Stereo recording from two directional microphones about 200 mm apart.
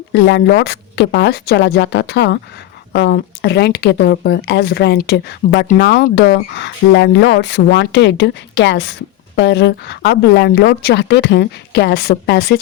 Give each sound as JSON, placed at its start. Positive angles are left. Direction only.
{"t": 0.1, "sound": "speech", "side_deg": 60}